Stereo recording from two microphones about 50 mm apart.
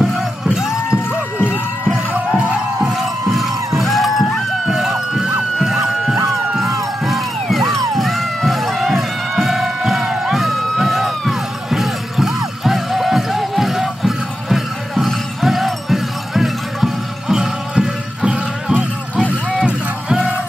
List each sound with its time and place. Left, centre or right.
0.0 s music: centre
2.1 s music: right
2.8 s crowd: centre
7.1 s a sound: centre
10.0 s music: centre